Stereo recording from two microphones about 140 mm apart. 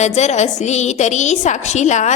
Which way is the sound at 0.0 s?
55° left (ahead or behind).